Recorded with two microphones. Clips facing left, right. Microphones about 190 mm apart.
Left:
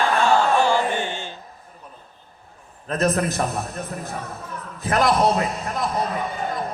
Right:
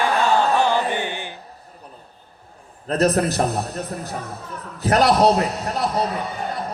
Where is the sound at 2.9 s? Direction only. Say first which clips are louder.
Right 3 dB; 35° right (ahead or behind).